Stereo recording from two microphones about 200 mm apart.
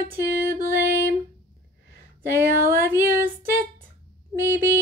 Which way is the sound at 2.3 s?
10° right (ahead or behind).